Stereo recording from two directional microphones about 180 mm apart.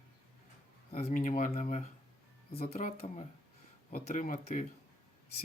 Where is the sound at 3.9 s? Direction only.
50° left (ahead or behind).